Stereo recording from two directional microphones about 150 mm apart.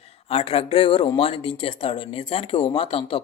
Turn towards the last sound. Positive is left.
turn(degrees=40)  # may be behind; listen again after turning